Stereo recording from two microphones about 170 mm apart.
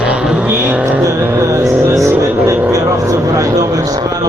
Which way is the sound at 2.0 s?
15° right (ahead or behind).